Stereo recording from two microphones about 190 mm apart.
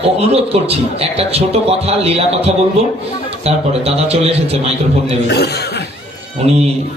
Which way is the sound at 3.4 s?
30° right (ahead or behind).